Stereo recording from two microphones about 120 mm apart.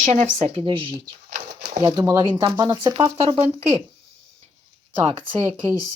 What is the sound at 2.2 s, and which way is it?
Speech, 40° right (ahead or behind).